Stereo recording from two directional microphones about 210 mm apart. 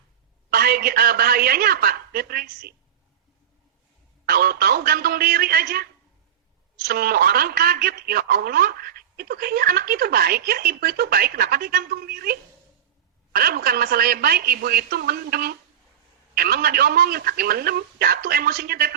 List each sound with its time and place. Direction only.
0.5 s a woman's voice: 45° right (ahead or behind)
4.3 s a woman's voice: 45° right (ahead or behind)